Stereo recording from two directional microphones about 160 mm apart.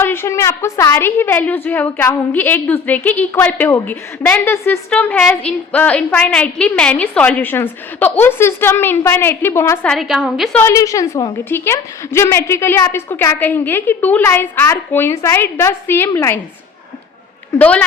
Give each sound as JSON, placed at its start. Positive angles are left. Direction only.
{"t": 0.0, "sound": "a woman's voice", "side_deg": 15}
{"t": 10.6, "sound": "a woman's voice", "side_deg": 20}
{"t": 17.6, "sound": "a woman's voice", "side_deg": 10}